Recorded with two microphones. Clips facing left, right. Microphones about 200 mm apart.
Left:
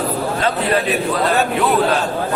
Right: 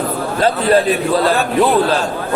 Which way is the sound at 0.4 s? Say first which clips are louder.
Right 7 dB; 30° right (ahead or behind).